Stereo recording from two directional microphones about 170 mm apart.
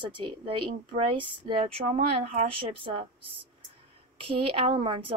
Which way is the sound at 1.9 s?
40° right (ahead or behind).